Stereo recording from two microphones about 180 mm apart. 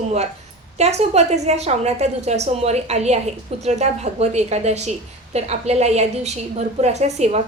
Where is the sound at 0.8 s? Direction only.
35° right (ahead or behind).